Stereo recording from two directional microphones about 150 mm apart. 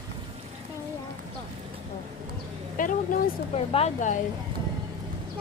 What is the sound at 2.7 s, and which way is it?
Speech, 65° left (ahead or behind).